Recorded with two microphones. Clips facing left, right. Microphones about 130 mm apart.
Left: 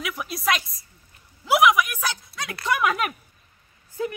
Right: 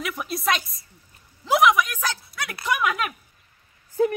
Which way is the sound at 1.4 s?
5° left (ahead or behind).